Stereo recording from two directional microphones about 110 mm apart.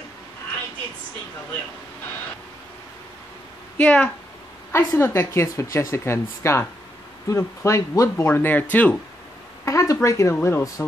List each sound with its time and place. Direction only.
3.7 s a woman's voice: 15° left (ahead or behind)
8.3 s speech: 15° left (ahead or behind)
9.7 s a woman's voice: 30° left (ahead or behind)